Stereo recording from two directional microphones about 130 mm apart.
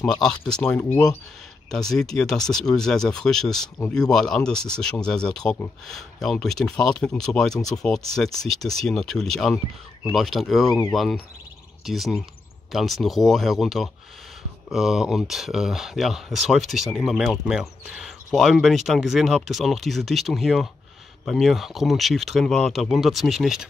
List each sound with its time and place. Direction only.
0.0 s speech: 5° left (ahead or behind)